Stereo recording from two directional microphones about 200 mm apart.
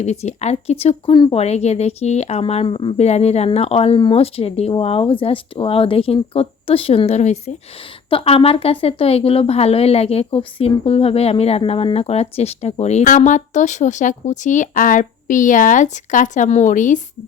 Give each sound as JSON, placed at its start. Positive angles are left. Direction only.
{"t": 0.0, "sound": "speech", "side_deg": 35}